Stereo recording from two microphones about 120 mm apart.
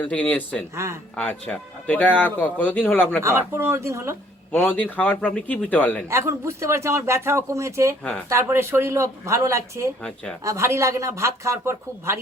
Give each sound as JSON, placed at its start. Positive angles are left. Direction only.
{"t": 0.0, "sound": "speech", "side_deg": 10}
{"t": 0.8, "sound": "speech", "side_deg": -25}
{"t": 1.1, "sound": "speech", "side_deg": 10}
{"t": 3.2, "sound": "speech", "side_deg": -20}
{"t": 4.5, "sound": "speech", "side_deg": 15}
{"t": 6.1, "sound": "speech", "side_deg": -25}